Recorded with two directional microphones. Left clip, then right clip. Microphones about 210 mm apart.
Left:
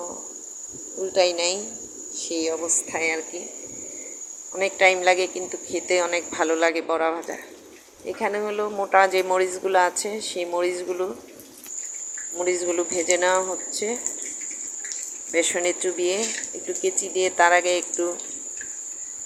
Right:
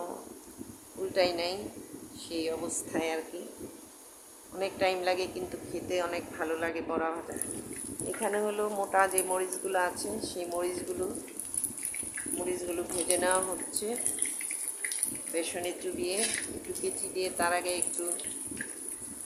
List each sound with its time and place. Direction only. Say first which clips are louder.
1.1 s speech: left 8 dB; 15° left (ahead or behind)
4.6 s speech: left 11 dB; 20° left (ahead or behind)
8.2 s speech: left 6 dB; 10° left (ahead or behind)
12.5 s speech: left 12 dB; 15° left (ahead or behind)
15.3 s speech: left 12 dB; 20° left (ahead or behind)
17.2 s speech: left 12 dB; 20° left (ahead or behind)